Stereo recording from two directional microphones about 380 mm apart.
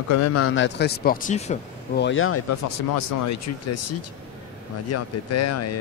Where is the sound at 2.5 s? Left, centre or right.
Left.